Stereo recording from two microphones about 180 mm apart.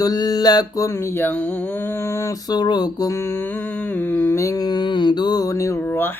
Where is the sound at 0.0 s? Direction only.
20° left (ahead or behind).